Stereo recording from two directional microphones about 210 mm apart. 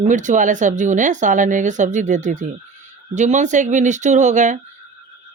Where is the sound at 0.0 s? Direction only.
35° right (ahead or behind).